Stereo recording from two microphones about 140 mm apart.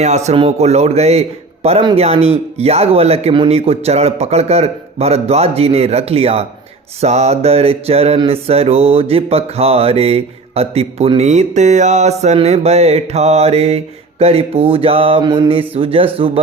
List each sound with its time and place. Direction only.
0.0 s speech: 55° right (ahead or behind)
0.3 s mantra: 45° right (ahead or behind)